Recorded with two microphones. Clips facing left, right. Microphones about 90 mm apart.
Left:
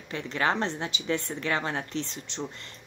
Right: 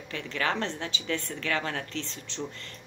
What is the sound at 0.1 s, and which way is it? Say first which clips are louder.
Speech: left 3 dB; 25° left (ahead or behind).